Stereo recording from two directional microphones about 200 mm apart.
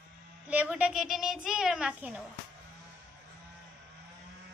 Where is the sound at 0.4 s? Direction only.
5° right (ahead or behind).